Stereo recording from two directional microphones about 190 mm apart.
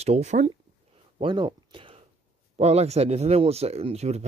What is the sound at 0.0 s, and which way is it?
Speech, 35° right (ahead or behind).